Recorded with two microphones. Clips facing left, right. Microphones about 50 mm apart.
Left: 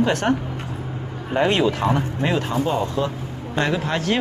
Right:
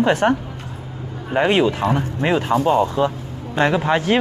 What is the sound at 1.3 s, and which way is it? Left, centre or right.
Speech, centre.